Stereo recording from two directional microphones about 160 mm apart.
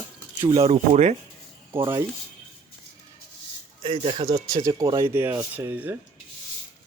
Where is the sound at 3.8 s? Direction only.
35° right (ahead or behind).